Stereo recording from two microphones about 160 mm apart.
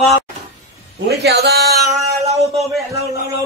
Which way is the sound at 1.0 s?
90° right.